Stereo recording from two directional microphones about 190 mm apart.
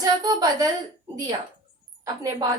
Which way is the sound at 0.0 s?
20° right (ahead or behind).